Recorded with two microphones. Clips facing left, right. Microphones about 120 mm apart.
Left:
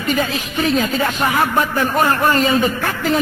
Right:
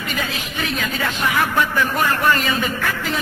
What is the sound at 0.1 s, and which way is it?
Speech, 45° left (ahead or behind).